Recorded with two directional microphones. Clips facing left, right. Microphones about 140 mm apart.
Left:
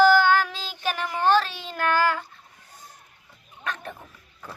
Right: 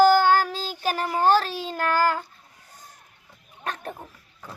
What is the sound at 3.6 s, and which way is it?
Speech, 35° right (ahead or behind).